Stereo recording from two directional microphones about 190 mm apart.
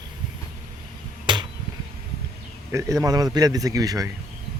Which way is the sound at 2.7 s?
15° right (ahead or behind).